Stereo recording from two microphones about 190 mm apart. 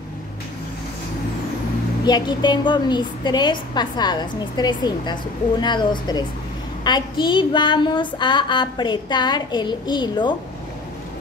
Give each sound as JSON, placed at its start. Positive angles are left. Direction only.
{"t": 2.0, "sound": "a woman's voice", "side_deg": 25}